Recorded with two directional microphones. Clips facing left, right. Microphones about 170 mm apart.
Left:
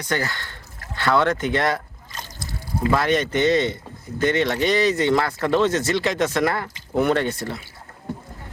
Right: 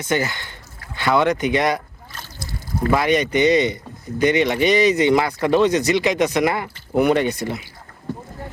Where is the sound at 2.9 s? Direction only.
10° right (ahead or behind).